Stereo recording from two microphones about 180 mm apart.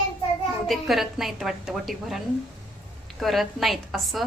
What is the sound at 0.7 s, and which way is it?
Speech, centre (ahead or behind).